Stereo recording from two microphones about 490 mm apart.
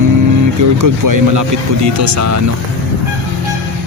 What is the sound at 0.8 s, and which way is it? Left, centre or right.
Speech, right.